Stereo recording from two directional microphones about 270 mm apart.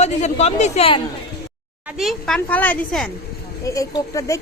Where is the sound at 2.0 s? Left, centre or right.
Centre.